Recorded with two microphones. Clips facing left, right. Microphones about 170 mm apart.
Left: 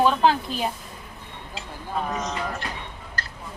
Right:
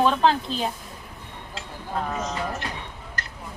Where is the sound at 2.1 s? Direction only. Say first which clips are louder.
Even; 10° right (ahead or behind).